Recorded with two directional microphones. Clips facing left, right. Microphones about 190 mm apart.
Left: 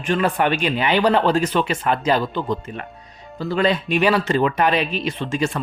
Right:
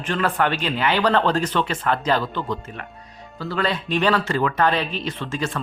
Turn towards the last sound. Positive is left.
turn(degrees=15)  # may be behind; listen again after turning